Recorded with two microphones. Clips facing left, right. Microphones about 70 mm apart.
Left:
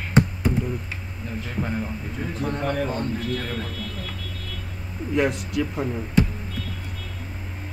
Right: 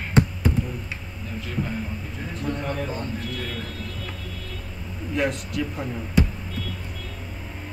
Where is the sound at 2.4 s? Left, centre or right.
Left.